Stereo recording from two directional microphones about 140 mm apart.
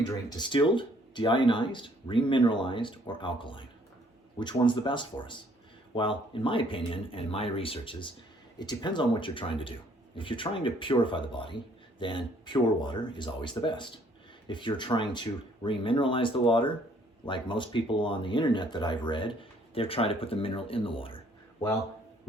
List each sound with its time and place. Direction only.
0.3 s speech: 30° left (ahead or behind)